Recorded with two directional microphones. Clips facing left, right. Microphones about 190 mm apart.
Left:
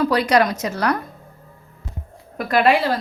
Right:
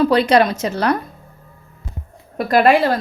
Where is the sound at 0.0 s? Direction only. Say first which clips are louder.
Right 3 dB; 25° right (ahead or behind).